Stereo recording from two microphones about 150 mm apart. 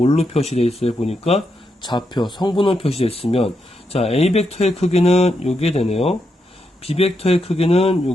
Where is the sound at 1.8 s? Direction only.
30° left (ahead or behind).